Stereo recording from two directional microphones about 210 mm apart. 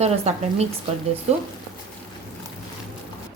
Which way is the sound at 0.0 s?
30° right (ahead or behind).